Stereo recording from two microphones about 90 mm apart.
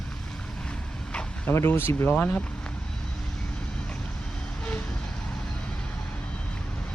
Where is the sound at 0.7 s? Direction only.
10° left (ahead or behind).